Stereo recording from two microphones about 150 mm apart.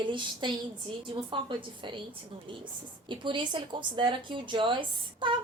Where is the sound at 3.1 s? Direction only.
30° right (ahead or behind).